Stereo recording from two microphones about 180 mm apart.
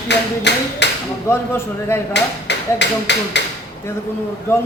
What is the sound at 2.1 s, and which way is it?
Speech, 75° left (ahead or behind).